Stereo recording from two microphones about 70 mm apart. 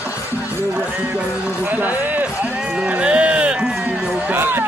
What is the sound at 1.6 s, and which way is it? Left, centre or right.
Speech, right.